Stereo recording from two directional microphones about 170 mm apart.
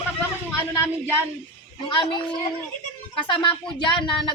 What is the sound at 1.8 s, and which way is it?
Speech, 30° left (ahead or behind).